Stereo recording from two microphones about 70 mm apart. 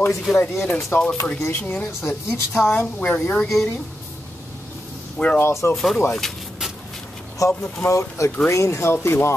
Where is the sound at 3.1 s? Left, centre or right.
Centre.